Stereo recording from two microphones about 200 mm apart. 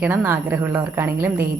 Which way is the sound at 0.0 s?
10° right (ahead or behind).